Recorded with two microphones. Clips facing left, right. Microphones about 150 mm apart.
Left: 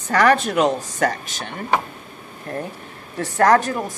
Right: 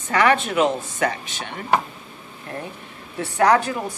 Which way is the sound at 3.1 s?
45° left (ahead or behind).